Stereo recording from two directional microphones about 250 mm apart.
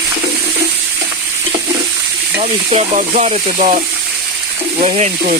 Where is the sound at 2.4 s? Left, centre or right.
Right.